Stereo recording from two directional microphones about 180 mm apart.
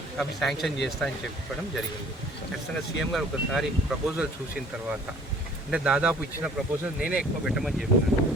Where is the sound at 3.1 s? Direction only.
Centre (ahead or behind).